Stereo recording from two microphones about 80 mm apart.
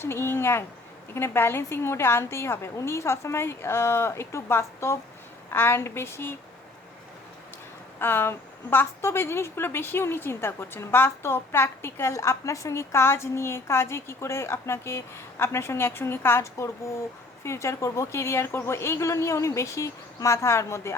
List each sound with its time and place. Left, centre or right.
0.0 s a woman's voice: left
7.9 s a woman's voice: left